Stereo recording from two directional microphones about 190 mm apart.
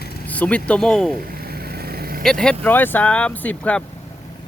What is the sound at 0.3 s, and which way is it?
Speech, 5° left (ahead or behind).